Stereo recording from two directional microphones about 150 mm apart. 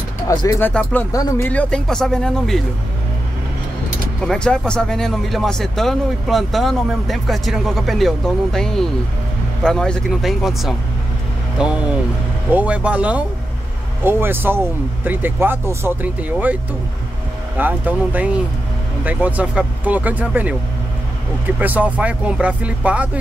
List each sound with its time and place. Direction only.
0.6 s speech: 10° left (ahead or behind)
1.5 s speech: 10° left (ahead or behind)
4.2 s speech: 5° left (ahead or behind); by 16.5 s 10° right (ahead or behind)
17.6 s speech: 10° right (ahead or behind)
21.5 s speech: 10° right (ahead or behind)